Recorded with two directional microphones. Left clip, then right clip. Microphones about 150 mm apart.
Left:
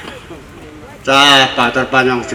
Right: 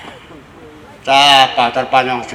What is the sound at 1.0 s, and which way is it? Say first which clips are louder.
A man's voice: even; 20° right (ahead or behind).